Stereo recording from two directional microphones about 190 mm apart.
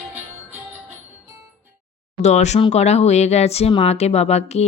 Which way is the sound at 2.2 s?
35° left (ahead or behind).